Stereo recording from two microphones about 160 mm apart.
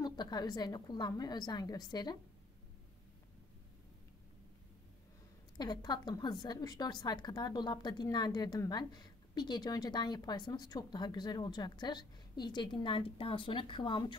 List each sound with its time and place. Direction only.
0.0 s a woman's voice: 25° left (ahead or behind)
5.6 s a woman's voice: 25° left (ahead or behind)